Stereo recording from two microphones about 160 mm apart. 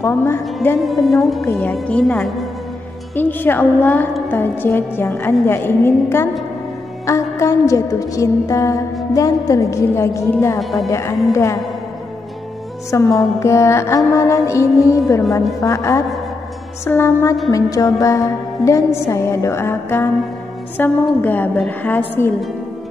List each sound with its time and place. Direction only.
0.0 s a woman's voice: 15° left (ahead or behind)
0.7 s a woman's voice: centre (ahead or behind)
7.1 s music: 20° left (ahead or behind)
10.6 s a woman's voice: centre (ahead or behind)
10.9 s music: 20° left (ahead or behind)
12.9 s a woman's voice: 20° left (ahead or behind)
15.6 s music: 20° left (ahead or behind)
19.0 s a woman's voice: 20° left (ahead or behind)